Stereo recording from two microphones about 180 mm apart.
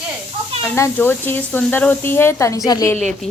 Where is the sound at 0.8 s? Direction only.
15° left (ahead or behind).